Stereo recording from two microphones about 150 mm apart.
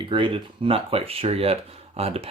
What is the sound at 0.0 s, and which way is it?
Speech, 35° right (ahead or behind).